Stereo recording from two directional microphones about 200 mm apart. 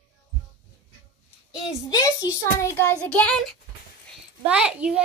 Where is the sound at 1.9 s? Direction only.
20° left (ahead or behind).